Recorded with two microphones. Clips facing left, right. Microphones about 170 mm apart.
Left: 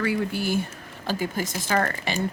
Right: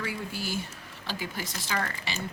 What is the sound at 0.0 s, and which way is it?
Speech, 60° left (ahead or behind).